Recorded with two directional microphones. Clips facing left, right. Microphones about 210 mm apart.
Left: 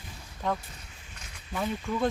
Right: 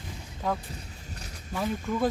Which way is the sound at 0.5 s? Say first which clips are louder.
Right 4 dB; 35° right (ahead or behind).